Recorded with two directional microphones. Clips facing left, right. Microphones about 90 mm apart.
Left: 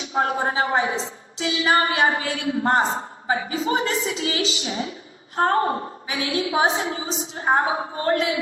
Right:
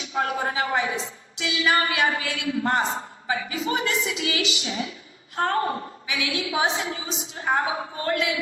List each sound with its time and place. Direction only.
0.0 s a woman's voice: 30° left (ahead or behind)